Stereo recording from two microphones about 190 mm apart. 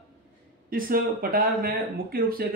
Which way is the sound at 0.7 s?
50° right (ahead or behind).